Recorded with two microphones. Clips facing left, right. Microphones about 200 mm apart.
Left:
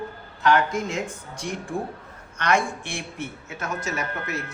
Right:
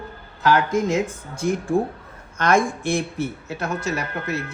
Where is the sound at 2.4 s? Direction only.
45° right (ahead or behind).